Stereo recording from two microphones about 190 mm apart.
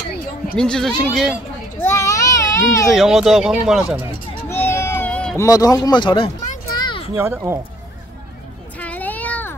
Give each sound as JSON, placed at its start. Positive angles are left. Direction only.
{"t": 0.6, "sound": "speech", "side_deg": 5}
{"t": 1.8, "sound": "children playing", "side_deg": 15}
{"t": 2.9, "sound": "speech", "side_deg": 0}
{"t": 4.5, "sound": "a sound", "side_deg": 10}
{"t": 7.2, "sound": "speech", "side_deg": -15}
{"t": 8.7, "sound": "child singing", "side_deg": 10}